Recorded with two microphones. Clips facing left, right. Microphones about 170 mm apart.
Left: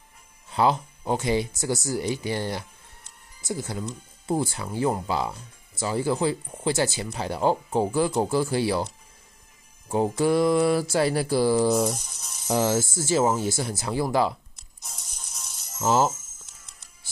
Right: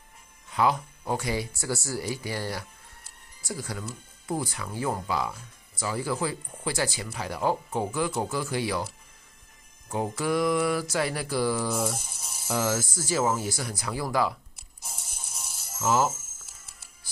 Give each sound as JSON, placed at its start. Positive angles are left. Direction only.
{"t": 0.5, "sound": "speech", "side_deg": 30}
{"t": 9.8, "sound": "speech", "side_deg": 30}
{"t": 12.1, "sound": "a sound", "side_deg": -10}
{"t": 12.4, "sound": "speech", "side_deg": 30}
{"t": 14.8, "sound": "music", "side_deg": -5}
{"t": 15.8, "sound": "speech", "side_deg": 30}
{"t": 16.1, "sound": "music", "side_deg": -5}